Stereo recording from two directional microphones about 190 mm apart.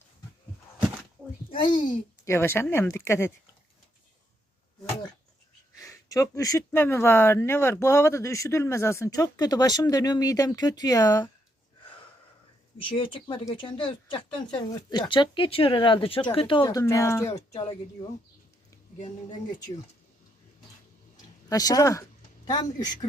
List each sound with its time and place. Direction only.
1.5 s a child's voice: 25° left (ahead or behind)
2.2 s speech: 15° left (ahead or behind)
5.7 s a sound: 15° left (ahead or behind)
6.7 s speech: 10° left (ahead or behind)
12.8 s speech: 25° left (ahead or behind)
18.9 s speech: 40° left (ahead or behind)
21.5 s speech: 20° left (ahead or behind)